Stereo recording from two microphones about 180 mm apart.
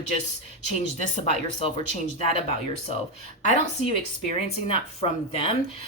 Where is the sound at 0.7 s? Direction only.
35° left (ahead or behind).